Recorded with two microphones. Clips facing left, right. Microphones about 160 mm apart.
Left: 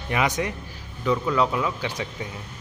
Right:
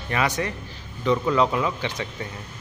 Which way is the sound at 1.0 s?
Centre (ahead or behind).